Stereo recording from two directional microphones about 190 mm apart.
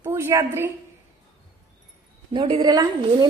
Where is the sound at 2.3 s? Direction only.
30° right (ahead or behind).